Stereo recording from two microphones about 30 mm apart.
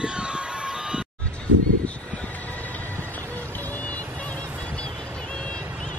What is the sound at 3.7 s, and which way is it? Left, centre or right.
Music, left.